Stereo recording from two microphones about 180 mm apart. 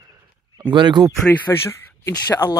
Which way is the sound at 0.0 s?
20° right (ahead or behind).